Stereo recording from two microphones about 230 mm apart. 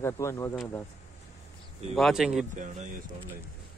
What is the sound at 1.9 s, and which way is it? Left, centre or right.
Speech, centre.